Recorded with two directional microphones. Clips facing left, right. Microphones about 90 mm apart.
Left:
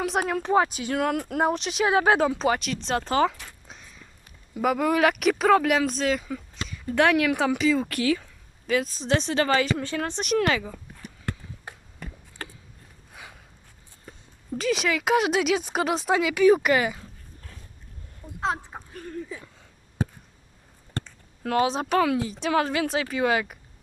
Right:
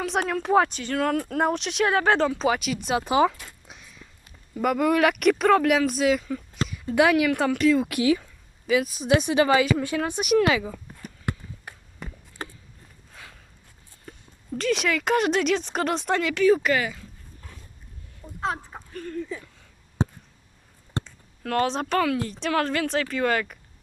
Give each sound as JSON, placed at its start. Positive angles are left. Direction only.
{"t": 0.0, "sound": "speech", "side_deg": 5}
{"t": 0.8, "sound": "speech", "side_deg": 15}
{"t": 3.2, "sound": "a sound", "side_deg": 0}
{"t": 4.6, "sound": "speech", "side_deg": 0}
{"t": 7.9, "sound": "speech", "side_deg": -15}
{"t": 8.2, "sound": "speech", "side_deg": -5}
{"t": 12.4, "sound": "a sound", "side_deg": -20}
{"t": 13.1, "sound": "walk", "side_deg": 15}
{"t": 14.6, "sound": "speech", "side_deg": 0}
{"t": 18.3, "sound": "a sound", "side_deg": 20}
{"t": 20.0, "sound": "a sound", "side_deg": -25}
{"t": 21.5, "sound": "speech", "side_deg": 5}
{"t": 22.5, "sound": "speech", "side_deg": 15}